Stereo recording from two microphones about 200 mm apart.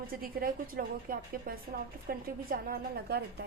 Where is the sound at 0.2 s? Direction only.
45° right (ahead or behind).